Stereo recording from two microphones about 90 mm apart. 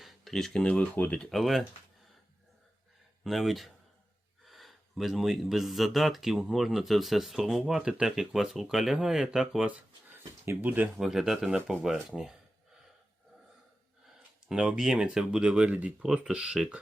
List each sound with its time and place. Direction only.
0.0 s speech: 5° left (ahead or behind); by 1.2 s 20° left (ahead or behind)
1.2 s speech: centre (ahead or behind)
3.2 s speech: centre (ahead or behind)
10.1 s a sound: 25° right (ahead or behind)
10.9 s speech: 5° right (ahead or behind)
14.4 s speech: 5° right (ahead or behind)